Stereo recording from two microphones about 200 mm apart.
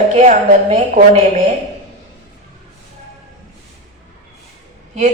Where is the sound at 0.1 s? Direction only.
35° right (ahead or behind).